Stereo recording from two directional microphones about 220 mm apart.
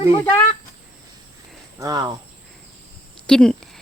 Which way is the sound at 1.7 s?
15° right (ahead or behind).